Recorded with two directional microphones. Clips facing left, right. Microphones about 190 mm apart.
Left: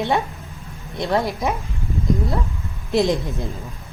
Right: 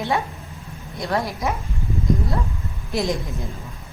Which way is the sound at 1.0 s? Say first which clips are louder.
Left 3 dB; 20° left (ahead or behind).